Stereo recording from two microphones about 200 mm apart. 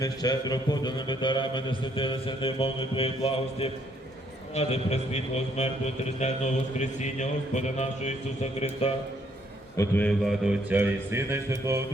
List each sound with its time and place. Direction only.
0.0 s a man's voice: 20° left (ahead or behind)
9.7 s a man's voice: 15° left (ahead or behind); by 11.8 s 15° right (ahead or behind)